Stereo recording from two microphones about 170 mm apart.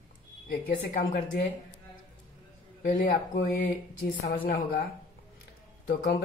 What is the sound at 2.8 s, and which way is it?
Speech, 55° left (ahead or behind).